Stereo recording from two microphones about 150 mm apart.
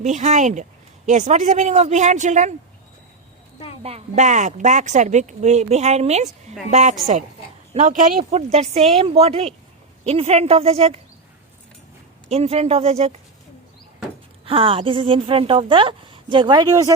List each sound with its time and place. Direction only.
0.0 s speech: 55° right (ahead or behind)
3.8 s speech: 45° right (ahead or behind)
8.2 s a woman's voice: 45° right (ahead or behind)
12.3 s speech: 45° right (ahead or behind)
14.4 s a woman's voice: 35° right (ahead or behind)